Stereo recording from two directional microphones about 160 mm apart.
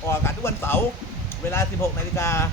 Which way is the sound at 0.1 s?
15° left (ahead or behind).